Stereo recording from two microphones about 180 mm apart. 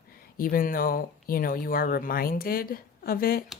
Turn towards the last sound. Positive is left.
turn(degrees=55)  # may be behind; listen again after turning